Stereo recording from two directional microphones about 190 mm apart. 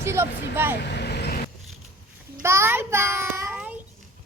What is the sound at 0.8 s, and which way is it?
Vehicle, 60° left (ahead or behind).